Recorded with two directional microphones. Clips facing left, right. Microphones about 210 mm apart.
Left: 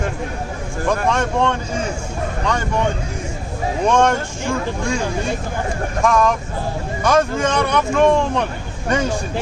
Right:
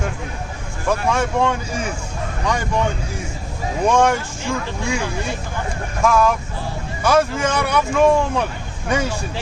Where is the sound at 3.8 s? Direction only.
10° right (ahead or behind).